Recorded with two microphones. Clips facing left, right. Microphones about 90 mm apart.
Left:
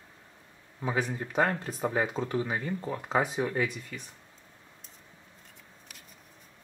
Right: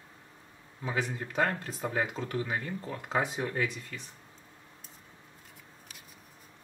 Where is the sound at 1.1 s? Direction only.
15° left (ahead or behind).